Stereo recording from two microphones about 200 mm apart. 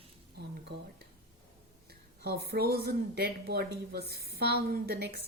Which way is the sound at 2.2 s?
55° right (ahead or behind).